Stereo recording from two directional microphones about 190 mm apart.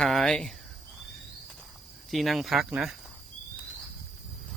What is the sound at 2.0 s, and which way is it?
Speech, centre (ahead or behind).